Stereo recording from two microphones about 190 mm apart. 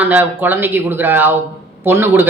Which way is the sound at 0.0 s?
10° right (ahead or behind).